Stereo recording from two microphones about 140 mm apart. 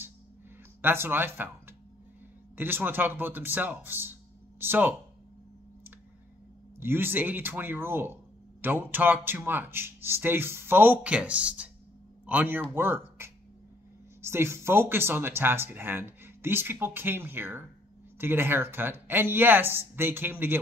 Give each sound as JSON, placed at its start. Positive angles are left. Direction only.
{"t": 0.8, "sound": "speech", "side_deg": -15}
{"t": 6.8, "sound": "speech", "side_deg": -15}